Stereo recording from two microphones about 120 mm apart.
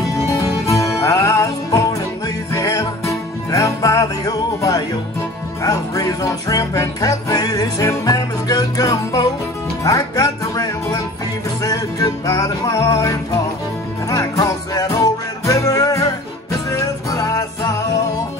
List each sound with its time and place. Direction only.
0.3 s music: 25° left (ahead or behind)